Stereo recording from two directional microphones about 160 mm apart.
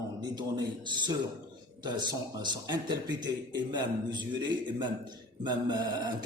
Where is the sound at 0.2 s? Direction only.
25° right (ahead or behind).